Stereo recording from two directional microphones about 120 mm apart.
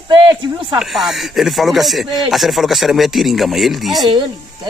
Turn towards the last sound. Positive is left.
turn(degrees=-35)  # may be behind; listen again after turning